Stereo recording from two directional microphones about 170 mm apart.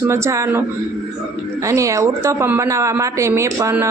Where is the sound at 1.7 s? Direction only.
20° right (ahead or behind).